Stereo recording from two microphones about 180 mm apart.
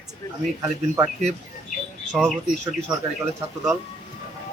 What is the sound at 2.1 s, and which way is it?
Speech, 5° left (ahead or behind).